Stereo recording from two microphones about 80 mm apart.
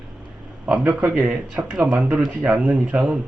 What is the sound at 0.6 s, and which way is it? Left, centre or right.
Speech, centre.